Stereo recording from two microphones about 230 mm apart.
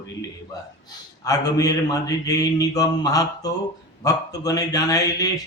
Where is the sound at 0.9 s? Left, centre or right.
Centre.